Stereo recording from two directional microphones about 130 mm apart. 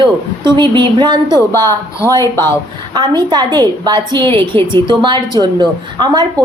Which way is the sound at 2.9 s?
35° right (ahead or behind).